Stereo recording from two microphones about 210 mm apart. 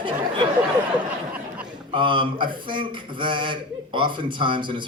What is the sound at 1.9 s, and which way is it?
Speech, 25° right (ahead or behind).